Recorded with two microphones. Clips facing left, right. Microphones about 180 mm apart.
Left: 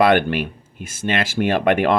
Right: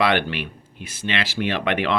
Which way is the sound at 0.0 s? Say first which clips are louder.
Left 5 dB; 50° left (ahead or behind).